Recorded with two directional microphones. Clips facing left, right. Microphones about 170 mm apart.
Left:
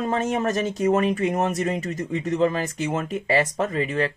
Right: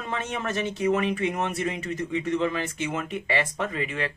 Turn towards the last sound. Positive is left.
turn(degrees=35)  # may be behind; listen again after turning